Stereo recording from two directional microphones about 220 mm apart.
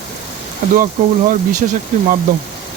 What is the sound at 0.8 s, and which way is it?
Speech, 35° right (ahead or behind).